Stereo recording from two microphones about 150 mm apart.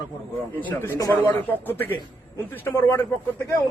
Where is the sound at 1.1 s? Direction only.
15° left (ahead or behind).